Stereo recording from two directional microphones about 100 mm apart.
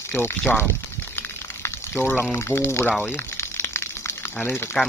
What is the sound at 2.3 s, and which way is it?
Speech, 25° left (ahead or behind).